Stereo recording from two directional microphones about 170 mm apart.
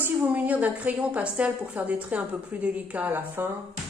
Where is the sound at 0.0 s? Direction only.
10° right (ahead or behind).